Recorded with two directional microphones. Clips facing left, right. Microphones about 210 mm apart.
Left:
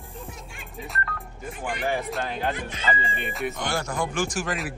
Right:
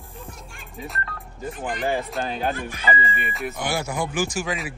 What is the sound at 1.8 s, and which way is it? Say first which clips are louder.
Speech: right 2 dB; 25° right (ahead or behind).